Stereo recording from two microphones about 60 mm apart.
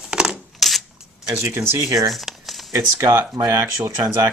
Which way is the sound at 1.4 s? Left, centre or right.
Right.